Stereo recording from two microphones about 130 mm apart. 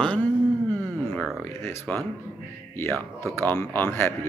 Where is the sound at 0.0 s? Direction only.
10° left (ahead or behind).